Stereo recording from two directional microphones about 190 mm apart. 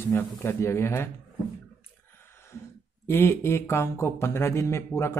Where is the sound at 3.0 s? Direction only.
15° left (ahead or behind).